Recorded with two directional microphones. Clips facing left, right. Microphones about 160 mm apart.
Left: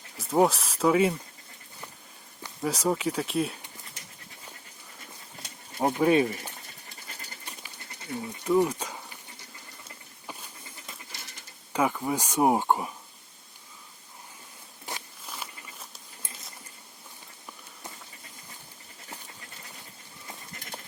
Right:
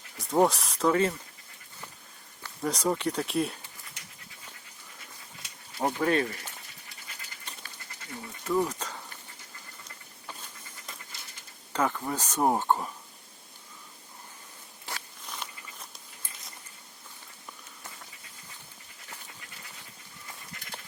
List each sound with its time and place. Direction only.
0.2 s speech: 5° left (ahead or behind)
2.4 s speech: 5° left (ahead or behind)
5.8 s speech: 15° left (ahead or behind)
8.1 s speech: 20° left (ahead or behind)
11.7 s speech: 10° left (ahead or behind)
15.3 s walk: 5° left (ahead or behind)